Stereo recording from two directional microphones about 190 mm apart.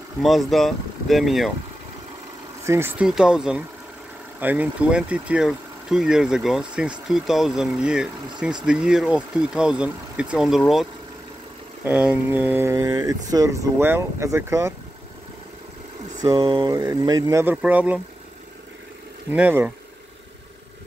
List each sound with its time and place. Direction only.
0.2 s speech: centre (ahead or behind)
2.6 s speech: 15° right (ahead or behind)
16.2 s speech: 20° right (ahead or behind)
19.3 s speech: 10° right (ahead or behind)